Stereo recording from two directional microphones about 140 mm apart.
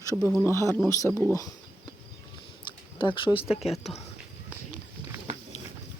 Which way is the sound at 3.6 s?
Centre (ahead or behind).